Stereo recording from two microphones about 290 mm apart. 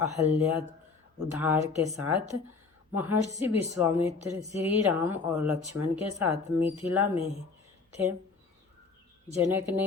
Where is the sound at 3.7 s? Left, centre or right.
Centre.